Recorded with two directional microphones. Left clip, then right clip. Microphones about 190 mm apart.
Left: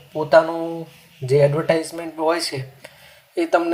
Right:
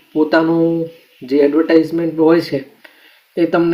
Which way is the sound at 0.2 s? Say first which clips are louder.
Right 3 dB; 35° left (ahead or behind).